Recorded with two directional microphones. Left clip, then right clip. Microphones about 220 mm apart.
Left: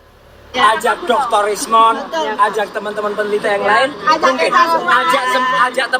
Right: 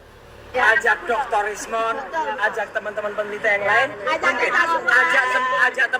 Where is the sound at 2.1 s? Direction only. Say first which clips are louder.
Left 5 dB; 50° left (ahead or behind).